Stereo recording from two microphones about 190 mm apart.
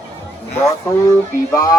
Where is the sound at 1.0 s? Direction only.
15° left (ahead or behind).